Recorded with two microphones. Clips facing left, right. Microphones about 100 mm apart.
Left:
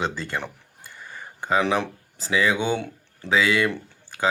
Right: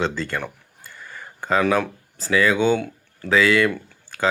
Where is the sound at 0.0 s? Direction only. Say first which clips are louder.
Right 3 dB; 15° left (ahead or behind).